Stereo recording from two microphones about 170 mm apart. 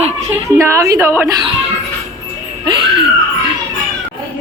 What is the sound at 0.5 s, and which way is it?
Speech, 15° right (ahead or behind).